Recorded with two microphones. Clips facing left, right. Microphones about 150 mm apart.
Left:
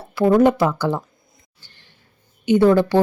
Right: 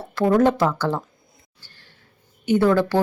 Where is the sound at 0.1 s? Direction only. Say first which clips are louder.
Left 3 dB; 10° left (ahead or behind).